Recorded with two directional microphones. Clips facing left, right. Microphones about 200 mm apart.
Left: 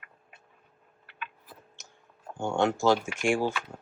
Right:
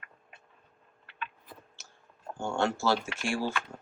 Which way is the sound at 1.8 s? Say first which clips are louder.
Left 2 dB; 15° left (ahead or behind).